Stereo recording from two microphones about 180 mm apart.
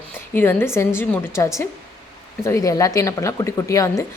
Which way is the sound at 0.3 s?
10° left (ahead or behind).